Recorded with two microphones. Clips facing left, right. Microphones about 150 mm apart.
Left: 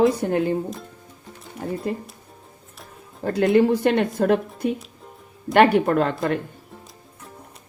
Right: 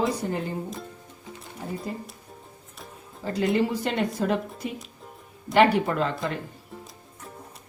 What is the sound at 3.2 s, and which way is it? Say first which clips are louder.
Speech: left 7 dB; 55° left (ahead or behind).